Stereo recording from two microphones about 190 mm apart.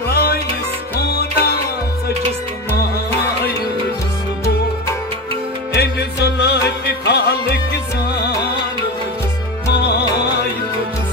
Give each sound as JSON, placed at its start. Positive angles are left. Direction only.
{"t": 0.1, "sound": "music", "side_deg": 55}
{"t": 5.8, "sound": "music", "side_deg": 60}
{"t": 9.7, "sound": "music", "side_deg": 60}